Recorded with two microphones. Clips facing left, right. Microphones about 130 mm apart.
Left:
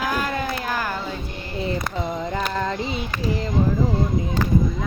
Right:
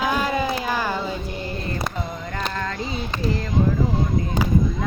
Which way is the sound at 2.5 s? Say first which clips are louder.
Left 3 dB; 20° left (ahead or behind).